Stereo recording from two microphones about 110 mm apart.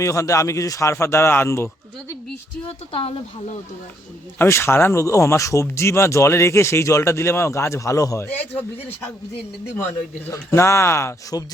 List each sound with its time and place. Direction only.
0.0 s speech: 30° left (ahead or behind)
2.6 s speech: 60° left (ahead or behind)
4.4 s speech: 25° left (ahead or behind)
10.2 s speech: 25° left (ahead or behind)